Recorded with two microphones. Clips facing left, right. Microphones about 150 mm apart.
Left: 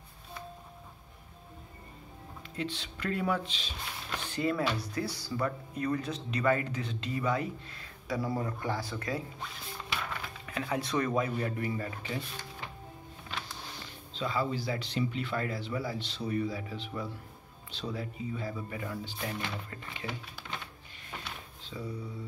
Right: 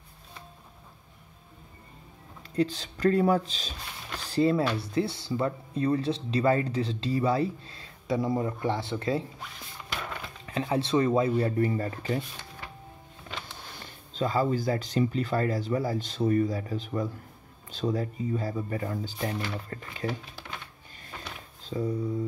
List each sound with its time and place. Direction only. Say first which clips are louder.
2.5 s speech: right 10 dB; 40° right (ahead or behind)
10.4 s speech: right 6 dB; 30° right (ahead or behind)
14.1 s speech: right 6 dB; 45° right (ahead or behind)
21.6 s speech: right 10 dB; 45° right (ahead or behind)